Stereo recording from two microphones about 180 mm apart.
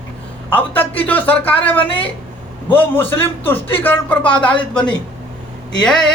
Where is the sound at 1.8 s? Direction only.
30° left (ahead or behind).